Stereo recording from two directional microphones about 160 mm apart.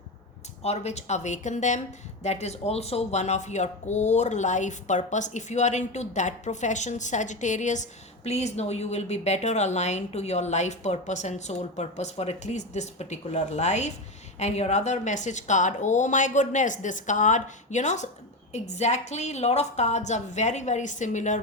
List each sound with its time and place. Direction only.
0.6 s speech: 40° left (ahead or behind)